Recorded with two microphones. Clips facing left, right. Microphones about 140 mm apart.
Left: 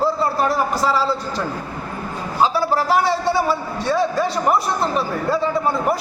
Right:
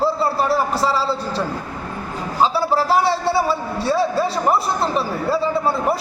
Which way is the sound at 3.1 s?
30° right (ahead or behind).